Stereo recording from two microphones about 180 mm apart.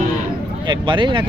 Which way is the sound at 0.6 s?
25° right (ahead or behind).